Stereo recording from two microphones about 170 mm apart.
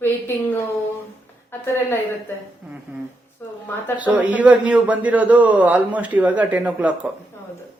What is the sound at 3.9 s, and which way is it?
A man's voice, 10° right (ahead or behind).